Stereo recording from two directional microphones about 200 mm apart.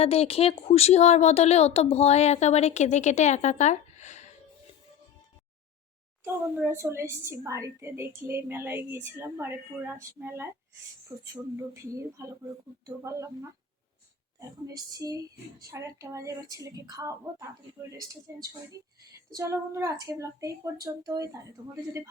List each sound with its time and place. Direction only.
0.0 s a woman's voice: 30° left (ahead or behind)
6.2 s a woman's voice: 10° right (ahead or behind)
14.7 s a woman's voice: 20° right (ahead or behind)